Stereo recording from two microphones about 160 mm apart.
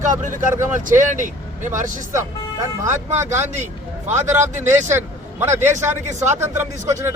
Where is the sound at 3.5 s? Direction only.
45° right (ahead or behind).